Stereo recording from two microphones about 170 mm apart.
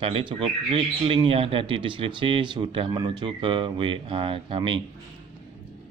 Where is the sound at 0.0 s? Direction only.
30° right (ahead or behind).